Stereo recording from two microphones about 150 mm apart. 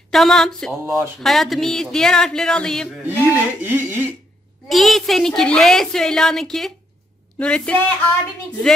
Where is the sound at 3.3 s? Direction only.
15° right (ahead or behind).